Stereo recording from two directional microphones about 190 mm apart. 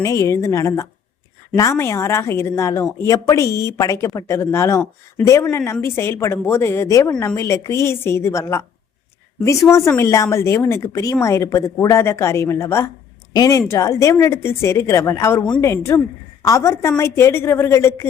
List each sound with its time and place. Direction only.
0.0 s a woman's voice: 15° left (ahead or behind)